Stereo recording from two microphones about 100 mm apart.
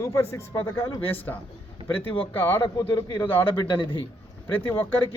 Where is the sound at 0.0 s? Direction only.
30° left (ahead or behind).